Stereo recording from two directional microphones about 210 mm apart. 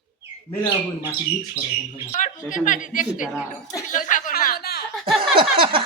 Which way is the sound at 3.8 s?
40° left (ahead or behind).